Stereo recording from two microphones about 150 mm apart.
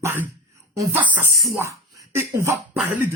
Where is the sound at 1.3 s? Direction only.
Centre (ahead or behind).